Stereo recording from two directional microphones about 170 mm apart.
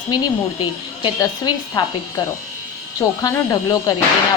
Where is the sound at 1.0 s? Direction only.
25° left (ahead or behind).